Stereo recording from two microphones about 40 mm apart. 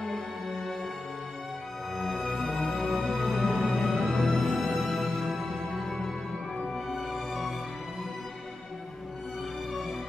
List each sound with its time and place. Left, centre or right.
0.0 s music: centre
2.2 s music: centre
9.7 s music: centre